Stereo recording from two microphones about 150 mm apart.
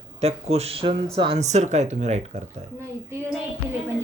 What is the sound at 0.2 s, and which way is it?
A man's voice, 45° right (ahead or behind).